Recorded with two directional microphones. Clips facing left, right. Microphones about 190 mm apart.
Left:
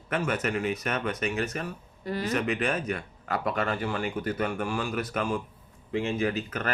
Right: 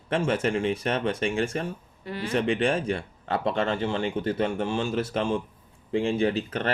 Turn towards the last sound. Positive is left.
turn(degrees=-30)  # may be behind; listen again after turning